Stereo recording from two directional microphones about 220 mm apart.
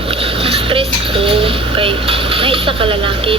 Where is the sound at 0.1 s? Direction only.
25° right (ahead or behind).